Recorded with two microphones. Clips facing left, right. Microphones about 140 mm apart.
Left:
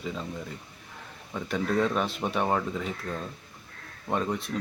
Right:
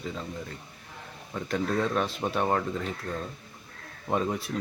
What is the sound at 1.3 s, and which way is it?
Speech, centre (ahead or behind).